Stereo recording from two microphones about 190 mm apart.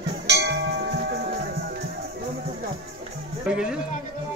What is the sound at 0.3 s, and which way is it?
Music, 60° right (ahead or behind).